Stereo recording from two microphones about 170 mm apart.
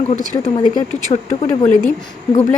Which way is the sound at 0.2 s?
45° left (ahead or behind).